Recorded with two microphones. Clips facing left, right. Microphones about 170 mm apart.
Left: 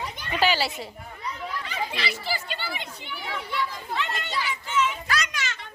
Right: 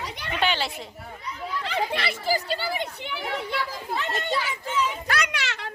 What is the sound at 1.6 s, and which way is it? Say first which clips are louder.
Speech: right 6 dB; 65° right (ahead or behind).